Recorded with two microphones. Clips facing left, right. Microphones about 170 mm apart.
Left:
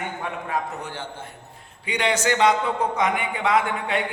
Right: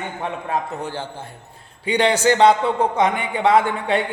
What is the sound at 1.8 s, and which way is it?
A man's voice, 30° right (ahead or behind).